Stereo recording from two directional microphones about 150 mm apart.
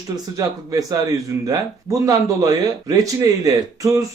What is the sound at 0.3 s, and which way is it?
A man's voice, 25° right (ahead or behind).